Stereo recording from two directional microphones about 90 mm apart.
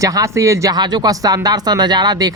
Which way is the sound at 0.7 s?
50° right (ahead or behind).